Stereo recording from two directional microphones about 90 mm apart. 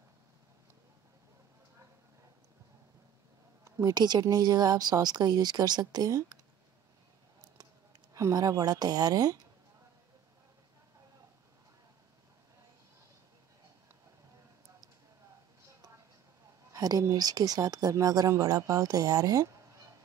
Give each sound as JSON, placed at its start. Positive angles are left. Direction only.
{"t": 3.6, "sound": "a sound", "side_deg": -35}
{"t": 3.9, "sound": "speech", "side_deg": -50}
{"t": 8.1, "sound": "speech", "side_deg": -40}
{"t": 16.7, "sound": "speech", "side_deg": -40}